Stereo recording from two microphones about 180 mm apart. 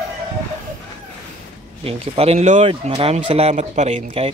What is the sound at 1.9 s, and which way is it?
Speech, 35° right (ahead or behind).